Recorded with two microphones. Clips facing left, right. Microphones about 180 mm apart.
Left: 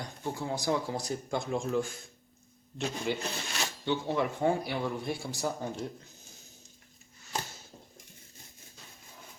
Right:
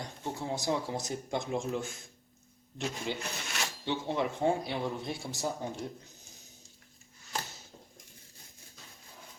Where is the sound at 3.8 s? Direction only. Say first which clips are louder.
Left 2 dB; 20° right (ahead or behind).